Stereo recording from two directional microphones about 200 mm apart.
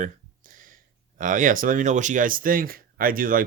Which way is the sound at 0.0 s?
40° right (ahead or behind).